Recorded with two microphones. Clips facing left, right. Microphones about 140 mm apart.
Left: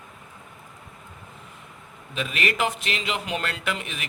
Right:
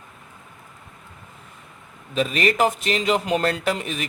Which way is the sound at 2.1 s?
35° right (ahead or behind).